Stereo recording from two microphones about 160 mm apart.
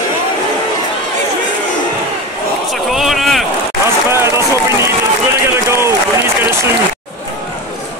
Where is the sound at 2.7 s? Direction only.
Centre (ahead or behind).